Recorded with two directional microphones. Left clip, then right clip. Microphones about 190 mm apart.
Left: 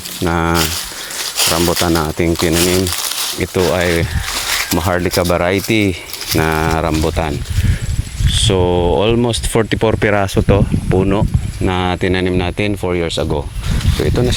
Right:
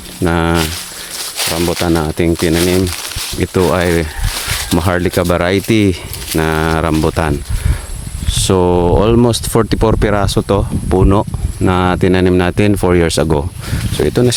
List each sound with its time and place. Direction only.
0.3 s speech: 30° right (ahead or behind)
1.5 s speech: 15° right (ahead or behind)
1.8 s speech: 25° right (ahead or behind)
6.3 s speech: 20° right (ahead or behind)
8.4 s speech: 30° right (ahead or behind)
9.5 s speech: 20° right (ahead or behind); by 14.3 s 45° right (ahead or behind)